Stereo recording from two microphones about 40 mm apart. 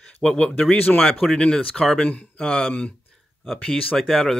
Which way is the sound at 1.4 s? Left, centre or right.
Centre.